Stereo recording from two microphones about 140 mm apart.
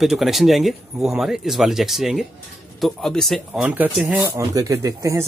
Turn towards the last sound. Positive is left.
turn(degrees=-20)  # may be behind; listen again after turning